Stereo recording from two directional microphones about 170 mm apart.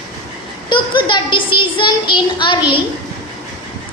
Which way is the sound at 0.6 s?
30° left (ahead or behind).